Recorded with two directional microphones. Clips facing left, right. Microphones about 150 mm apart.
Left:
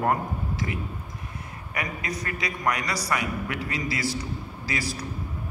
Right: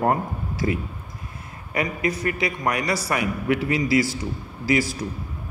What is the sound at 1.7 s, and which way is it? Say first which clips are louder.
A man's voice: right 7 dB; 25° right (ahead or behind).